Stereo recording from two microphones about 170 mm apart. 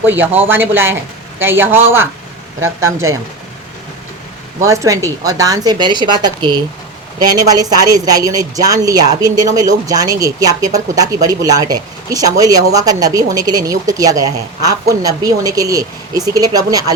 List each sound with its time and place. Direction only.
0.0 s speech: 10° right (ahead or behind)
4.6 s speech: 20° right (ahead or behind)